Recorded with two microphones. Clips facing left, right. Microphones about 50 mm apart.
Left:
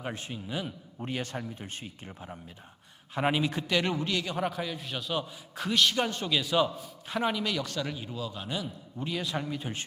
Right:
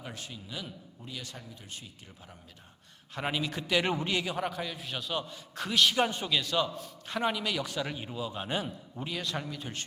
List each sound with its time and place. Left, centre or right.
0.0 s a man's voice: left
0.9 s speech: left
3.2 s a man's voice: centre
3.8 s a man's voice: centre
4.3 s a man's voice: centre; by 8.7 s right
9.0 s a man's voice: centre
9.5 s a man's voice: centre